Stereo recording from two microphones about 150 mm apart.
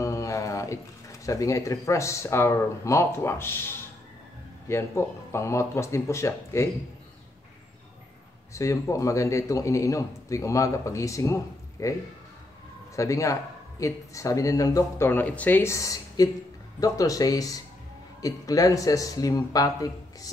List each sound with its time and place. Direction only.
0.0 s speech: 20° left (ahead or behind)
8.5 s speech: 20° left (ahead or behind)